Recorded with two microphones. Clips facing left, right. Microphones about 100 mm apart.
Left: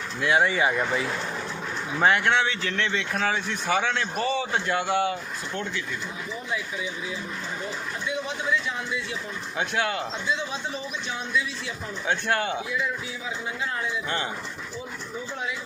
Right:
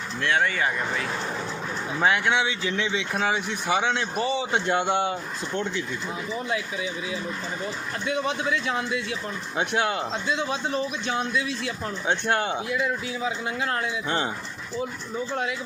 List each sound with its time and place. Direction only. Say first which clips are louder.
0.2 s speech: left 2 dB; 10° left (ahead or behind)
2.0 s speech: left 1 dB; centre (ahead or behind); by 5.1 s 25° right (ahead or behind)
6.5 s a man's voice: even; 70° right (ahead or behind)
9.6 s a man's voice: right 2 dB; 25° right (ahead or behind)
10.3 s a man's voice: right 5 dB; 60° right (ahead or behind)
12.0 s a man's voice: right 1 dB; 25° right (ahead or behind)